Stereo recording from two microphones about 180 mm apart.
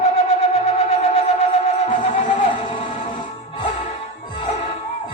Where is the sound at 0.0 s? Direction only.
35° left (ahead or behind).